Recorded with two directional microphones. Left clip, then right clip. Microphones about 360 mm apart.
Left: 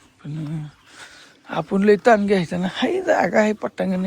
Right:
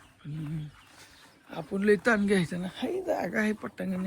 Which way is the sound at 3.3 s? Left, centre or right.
Centre.